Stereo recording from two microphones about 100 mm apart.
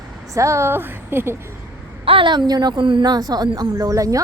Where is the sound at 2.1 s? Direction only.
55° right (ahead or behind); by 4.2 s 35° right (ahead or behind).